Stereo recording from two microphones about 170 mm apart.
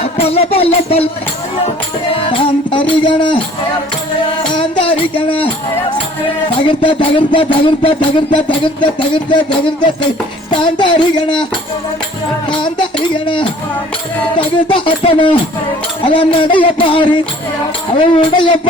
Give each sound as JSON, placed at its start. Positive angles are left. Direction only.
{"t": 0.0, "sound": "music", "side_deg": 35}
{"t": 2.4, "sound": "music", "side_deg": 30}
{"t": 4.5, "sound": "music", "side_deg": 30}
{"t": 6.6, "sound": "music", "side_deg": 30}
{"t": 12.5, "sound": "music", "side_deg": 30}